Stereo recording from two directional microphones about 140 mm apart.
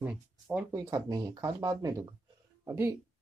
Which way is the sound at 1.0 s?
30° right (ahead or behind).